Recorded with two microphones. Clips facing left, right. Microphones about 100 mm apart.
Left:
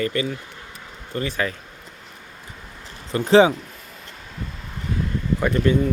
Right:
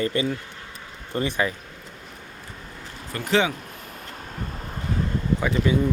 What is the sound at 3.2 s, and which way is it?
Speech, 30° left (ahead or behind).